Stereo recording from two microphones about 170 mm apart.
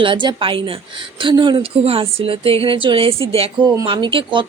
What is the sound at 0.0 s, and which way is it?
A woman's voice, 30° right (ahead or behind).